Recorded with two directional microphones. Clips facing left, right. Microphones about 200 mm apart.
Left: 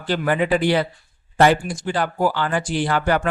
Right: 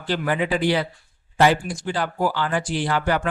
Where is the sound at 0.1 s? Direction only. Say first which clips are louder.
Left 3 dB; 50° left (ahead or behind).